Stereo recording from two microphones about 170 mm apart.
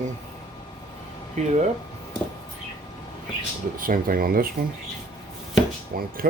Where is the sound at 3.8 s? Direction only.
55° right (ahead or behind).